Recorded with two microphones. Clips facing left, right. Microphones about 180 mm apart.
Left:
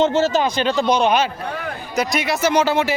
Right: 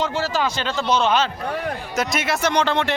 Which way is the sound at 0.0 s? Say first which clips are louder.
Left 6 dB; 25° left (ahead or behind).